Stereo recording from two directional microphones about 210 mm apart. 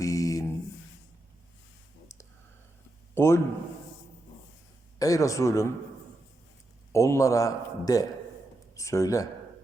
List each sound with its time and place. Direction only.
0.0 s a sound: 15° left (ahead or behind)
3.2 s a man's voice: 10° left (ahead or behind)
4.9 s a man's voice: 15° left (ahead or behind)
6.9 s a man's voice: 15° left (ahead or behind)